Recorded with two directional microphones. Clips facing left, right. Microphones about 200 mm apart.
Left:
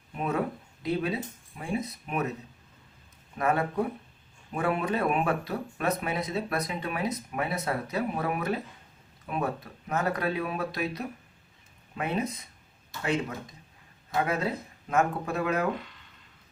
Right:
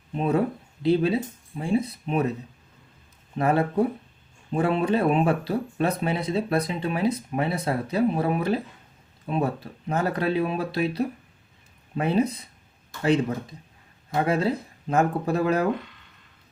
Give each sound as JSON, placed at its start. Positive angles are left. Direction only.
{"t": 0.1, "sound": "speech", "side_deg": -30}
{"t": 3.3, "sound": "speech", "side_deg": -30}